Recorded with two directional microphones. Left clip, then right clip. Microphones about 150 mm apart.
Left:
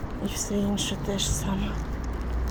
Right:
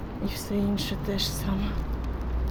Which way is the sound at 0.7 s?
65° right (ahead or behind).